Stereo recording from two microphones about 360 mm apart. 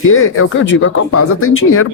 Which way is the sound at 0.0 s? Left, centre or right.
Left.